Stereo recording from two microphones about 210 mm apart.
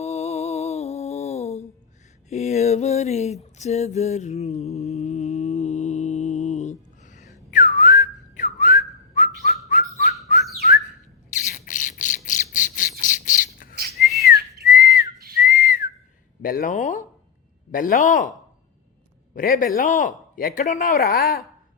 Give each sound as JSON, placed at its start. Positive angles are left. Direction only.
{"t": 0.0, "sound": "music", "side_deg": 30}
{"t": 2.3, "sound": "a sound", "side_deg": 30}
{"t": 7.5, "sound": "whistling", "side_deg": 40}
{"t": 11.3, "sound": "squawk", "side_deg": 35}
{"t": 14.3, "sound": "whistle", "side_deg": 40}
{"t": 15.4, "sound": "whistling", "side_deg": 40}
{"t": 16.4, "sound": "a sound", "side_deg": 40}
{"t": 17.7, "sound": "a man's voice", "side_deg": 40}